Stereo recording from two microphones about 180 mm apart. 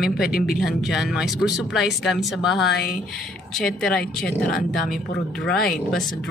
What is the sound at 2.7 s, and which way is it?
Speech, 65° left (ahead or behind).